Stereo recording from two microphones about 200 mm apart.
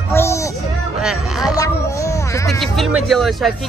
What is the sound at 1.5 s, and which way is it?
Speech, 15° left (ahead or behind).